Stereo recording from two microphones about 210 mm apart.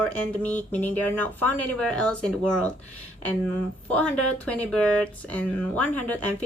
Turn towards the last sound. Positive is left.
turn(degrees=5)  # may be behind; listen again after turning